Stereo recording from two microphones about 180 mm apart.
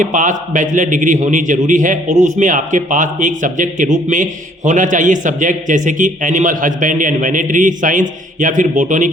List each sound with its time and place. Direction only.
0.0 s speech: 45° right (ahead or behind)